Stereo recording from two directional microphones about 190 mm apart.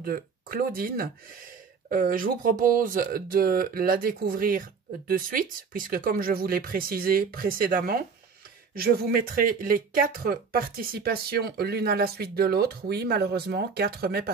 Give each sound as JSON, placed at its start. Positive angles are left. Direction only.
{"t": 0.0, "sound": "speech", "side_deg": -50}